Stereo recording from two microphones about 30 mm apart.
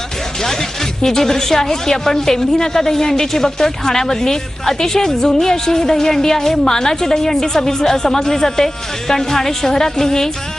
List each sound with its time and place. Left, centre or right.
0.4 s a woman's voice: centre